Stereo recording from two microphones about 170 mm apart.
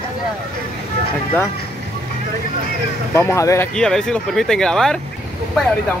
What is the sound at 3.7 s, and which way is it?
Speech, 5° left (ahead or behind).